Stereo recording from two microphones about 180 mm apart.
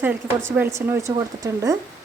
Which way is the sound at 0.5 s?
15° right (ahead or behind).